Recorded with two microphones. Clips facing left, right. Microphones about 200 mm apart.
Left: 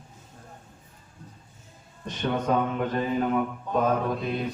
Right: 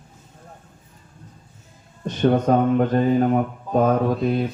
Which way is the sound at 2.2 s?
45° right (ahead or behind).